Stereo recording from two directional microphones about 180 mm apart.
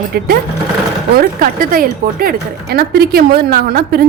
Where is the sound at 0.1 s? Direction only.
60° right (ahead or behind).